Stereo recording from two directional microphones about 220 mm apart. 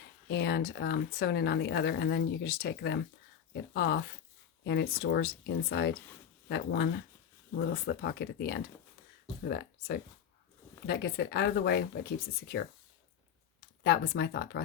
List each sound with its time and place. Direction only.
0.3 s speech: 50° left (ahead or behind)